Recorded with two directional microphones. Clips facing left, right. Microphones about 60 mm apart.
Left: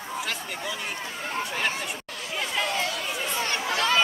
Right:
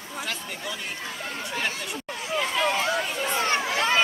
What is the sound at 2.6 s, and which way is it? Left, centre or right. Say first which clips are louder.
Chatter: right 4 dB; right.